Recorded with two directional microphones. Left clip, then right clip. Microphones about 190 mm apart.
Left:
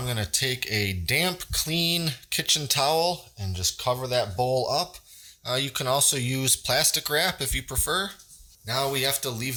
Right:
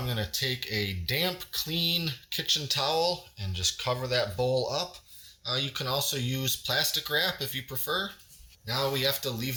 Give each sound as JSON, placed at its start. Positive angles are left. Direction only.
{"t": 0.0, "sound": "speech", "side_deg": 40}